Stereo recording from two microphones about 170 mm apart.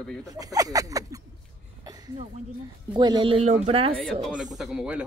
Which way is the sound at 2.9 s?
25° right (ahead or behind).